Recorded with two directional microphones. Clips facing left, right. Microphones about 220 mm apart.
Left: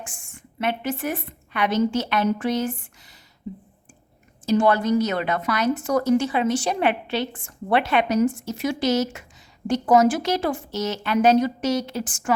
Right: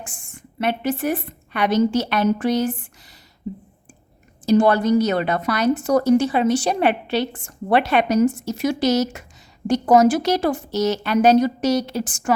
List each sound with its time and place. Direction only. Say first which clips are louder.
0.6 s a woman's voice: right 4 dB; 35° right (ahead or behind)
4.4 s a woman's voice: right 3 dB; 35° right (ahead or behind)